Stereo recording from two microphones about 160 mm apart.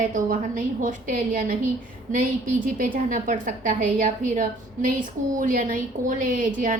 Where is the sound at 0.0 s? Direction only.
55° right (ahead or behind).